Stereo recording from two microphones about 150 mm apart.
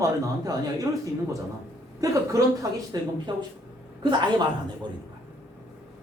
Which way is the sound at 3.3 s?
30° right (ahead or behind).